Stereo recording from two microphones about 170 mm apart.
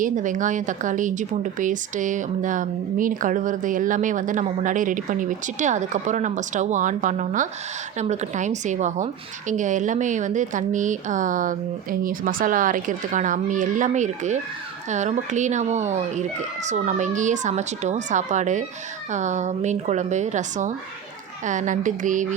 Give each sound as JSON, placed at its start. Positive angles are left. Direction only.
{"t": 0.0, "sound": "speech", "side_deg": -50}